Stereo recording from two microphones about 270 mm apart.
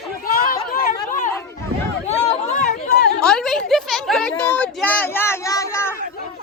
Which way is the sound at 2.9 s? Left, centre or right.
Left.